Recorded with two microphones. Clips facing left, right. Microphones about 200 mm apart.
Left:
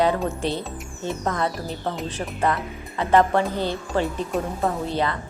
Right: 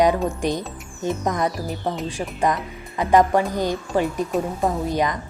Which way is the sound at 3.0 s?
15° right (ahead or behind).